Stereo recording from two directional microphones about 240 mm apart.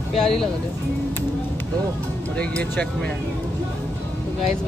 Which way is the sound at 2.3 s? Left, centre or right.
Centre.